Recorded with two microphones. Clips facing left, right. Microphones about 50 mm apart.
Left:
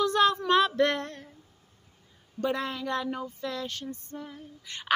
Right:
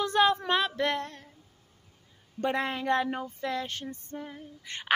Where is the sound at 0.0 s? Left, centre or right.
Right.